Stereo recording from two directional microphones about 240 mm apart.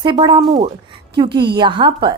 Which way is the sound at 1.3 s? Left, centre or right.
Right.